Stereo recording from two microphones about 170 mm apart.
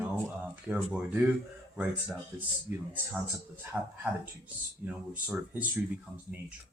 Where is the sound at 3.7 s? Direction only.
5° right (ahead or behind).